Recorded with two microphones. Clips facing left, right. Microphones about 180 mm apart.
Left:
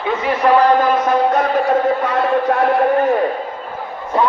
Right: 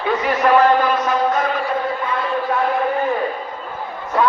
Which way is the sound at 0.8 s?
55° left (ahead or behind).